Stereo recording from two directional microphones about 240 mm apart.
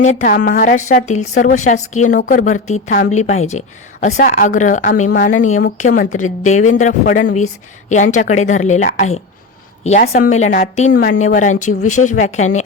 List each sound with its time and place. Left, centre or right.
0.0 s a woman's voice: left